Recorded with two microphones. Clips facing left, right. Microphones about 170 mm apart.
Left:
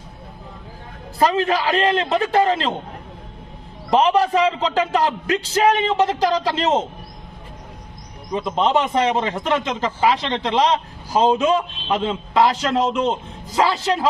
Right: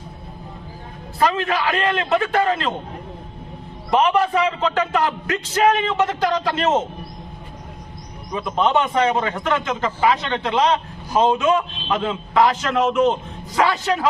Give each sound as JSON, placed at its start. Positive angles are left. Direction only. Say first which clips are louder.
{"t": 1.2, "sound": "a man's voice", "louder": "left 2 dB", "side_deg": 35}
{"t": 3.9, "sound": "a man's voice", "louder": "left 1 dB", "side_deg": 35}
{"t": 8.3, "sound": "a man's voice", "louder": "left 1 dB", "side_deg": 30}